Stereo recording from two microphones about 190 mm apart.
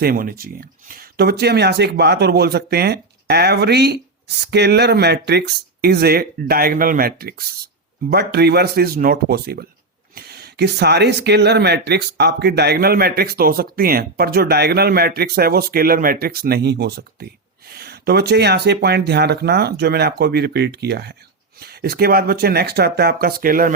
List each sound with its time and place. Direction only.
0.0 s speech: 50° right (ahead or behind)